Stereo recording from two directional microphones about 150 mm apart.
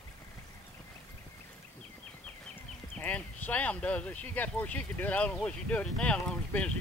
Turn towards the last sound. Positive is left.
turn(degrees=10)  # may be behind; listen again after turning